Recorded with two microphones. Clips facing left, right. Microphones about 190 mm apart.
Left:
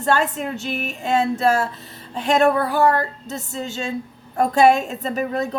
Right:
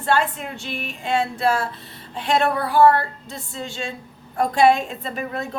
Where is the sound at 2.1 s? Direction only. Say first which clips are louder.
Left 4 dB; 45° left (ahead or behind).